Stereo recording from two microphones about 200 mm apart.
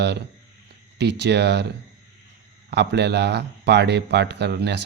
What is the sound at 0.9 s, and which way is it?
Speech, 60° right (ahead or behind).